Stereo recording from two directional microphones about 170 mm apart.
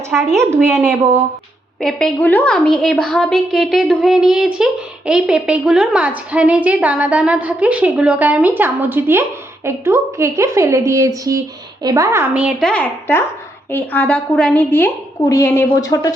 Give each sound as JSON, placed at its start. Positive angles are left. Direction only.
{"t": 0.1, "sound": "a woman's voice", "side_deg": 0}
{"t": 1.8, "sound": "a woman's voice", "side_deg": 0}